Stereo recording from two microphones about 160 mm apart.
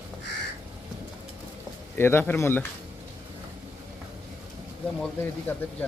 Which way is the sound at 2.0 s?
15° left (ahead or behind).